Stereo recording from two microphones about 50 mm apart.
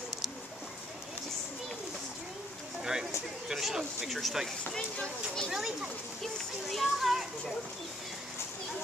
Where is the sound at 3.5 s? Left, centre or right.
Centre.